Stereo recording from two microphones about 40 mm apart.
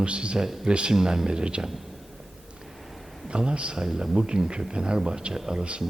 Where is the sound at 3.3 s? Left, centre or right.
Right.